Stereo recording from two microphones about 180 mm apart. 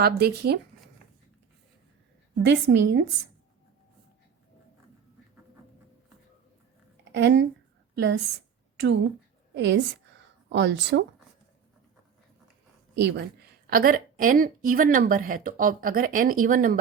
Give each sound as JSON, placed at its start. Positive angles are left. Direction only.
{"t": 0.0, "sound": "speech", "side_deg": -60}
{"t": 2.4, "sound": "a woman's voice", "side_deg": -80}
{"t": 6.9, "sound": "a sound", "side_deg": -75}
{"t": 7.9, "sound": "speech", "side_deg": -75}
{"t": 9.6, "sound": "a woman's voice", "side_deg": -80}
{"t": 13.0, "sound": "speech", "side_deg": -70}
{"t": 13.7, "sound": "speech", "side_deg": -55}